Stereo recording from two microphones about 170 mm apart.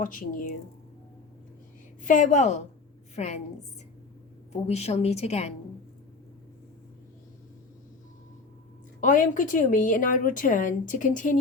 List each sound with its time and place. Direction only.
0.0 s a woman's voice: 55° left (ahead or behind)
2.0 s a woman's voice: 50° left (ahead or behind)
9.0 s a woman's voice: 50° left (ahead or behind)